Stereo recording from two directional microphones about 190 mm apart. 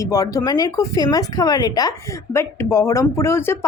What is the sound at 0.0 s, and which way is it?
Speech, 15° left (ahead or behind).